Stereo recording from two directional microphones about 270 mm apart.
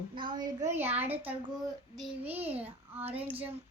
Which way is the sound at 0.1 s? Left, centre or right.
Centre.